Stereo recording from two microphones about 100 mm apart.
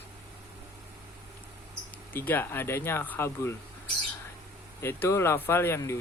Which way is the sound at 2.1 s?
20° left (ahead or behind).